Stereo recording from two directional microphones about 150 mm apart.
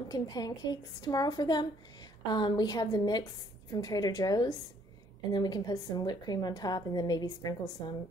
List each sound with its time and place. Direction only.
0.1 s a woman's voice: 25° left (ahead or behind)